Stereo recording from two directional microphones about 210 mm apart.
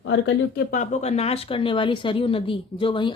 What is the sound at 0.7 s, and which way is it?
Speech, 35° left (ahead or behind).